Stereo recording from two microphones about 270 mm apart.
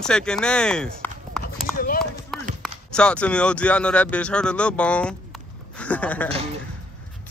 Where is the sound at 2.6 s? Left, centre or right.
Centre.